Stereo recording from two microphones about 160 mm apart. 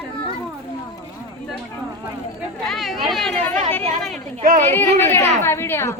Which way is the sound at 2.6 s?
Centre (ahead or behind).